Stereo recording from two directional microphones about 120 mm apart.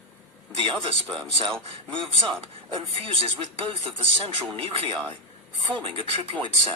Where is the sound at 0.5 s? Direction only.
45° right (ahead or behind).